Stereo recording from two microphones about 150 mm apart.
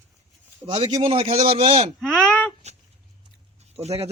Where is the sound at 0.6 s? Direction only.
40° right (ahead or behind).